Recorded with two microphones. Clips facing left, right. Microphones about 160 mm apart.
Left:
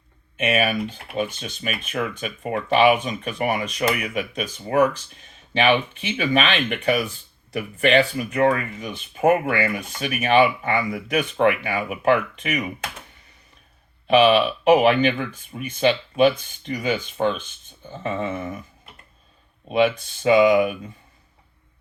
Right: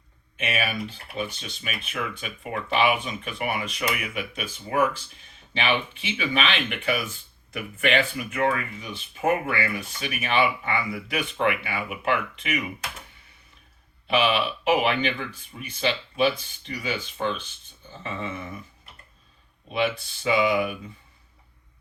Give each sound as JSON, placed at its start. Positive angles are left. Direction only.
{"t": 0.4, "sound": "speech", "side_deg": 45}
{"t": 14.1, "sound": "speech", "side_deg": 40}
{"t": 19.6, "sound": "speech", "side_deg": 45}